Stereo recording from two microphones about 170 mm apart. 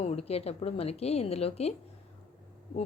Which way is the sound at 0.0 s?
35° left (ahead or behind).